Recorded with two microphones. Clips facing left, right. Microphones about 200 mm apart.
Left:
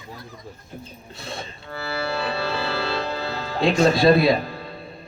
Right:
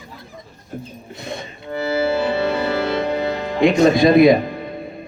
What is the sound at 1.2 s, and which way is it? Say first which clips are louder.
Music: right 5 dB; 20° right (ahead or behind).